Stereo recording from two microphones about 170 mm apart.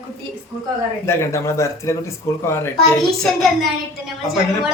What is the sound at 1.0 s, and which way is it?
Speech, 15° left (ahead or behind).